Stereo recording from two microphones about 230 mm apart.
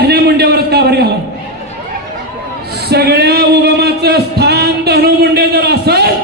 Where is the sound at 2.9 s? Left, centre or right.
Right.